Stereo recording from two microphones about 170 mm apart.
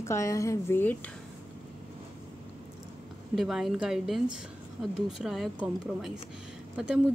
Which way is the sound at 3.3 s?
Centre (ahead or behind).